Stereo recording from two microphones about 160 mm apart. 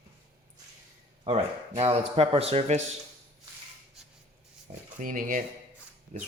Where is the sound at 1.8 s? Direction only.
40° right (ahead or behind).